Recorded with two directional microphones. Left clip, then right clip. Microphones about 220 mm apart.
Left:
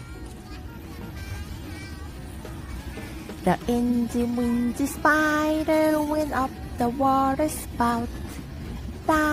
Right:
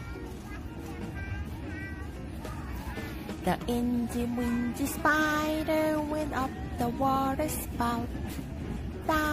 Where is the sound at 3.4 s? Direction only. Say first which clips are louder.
Left 7 dB; 25° left (ahead or behind).